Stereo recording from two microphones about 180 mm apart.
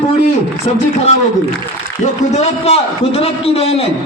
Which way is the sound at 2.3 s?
35° left (ahead or behind).